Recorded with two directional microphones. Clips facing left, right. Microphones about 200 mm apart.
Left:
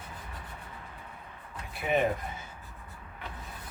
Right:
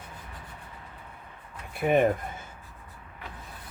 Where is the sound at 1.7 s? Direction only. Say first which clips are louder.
Right 5 dB; 50° right (ahead or behind).